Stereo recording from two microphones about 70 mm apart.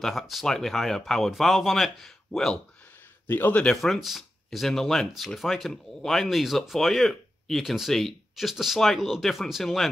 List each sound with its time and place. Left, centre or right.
0.0 s speech: centre
3.3 s speech: left
3.7 s speech: centre